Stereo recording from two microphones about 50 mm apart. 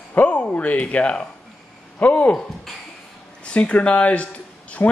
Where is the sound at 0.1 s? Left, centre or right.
Left.